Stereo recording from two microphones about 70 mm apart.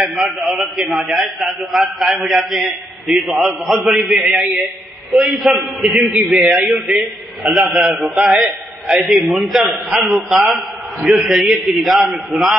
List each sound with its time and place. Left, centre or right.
0.0 s a man's voice: centre
7.4 s a man's voice: centre
7.9 s a man's voice: centre
9.8 s a man's voice: right
10.1 s a man's voice: centre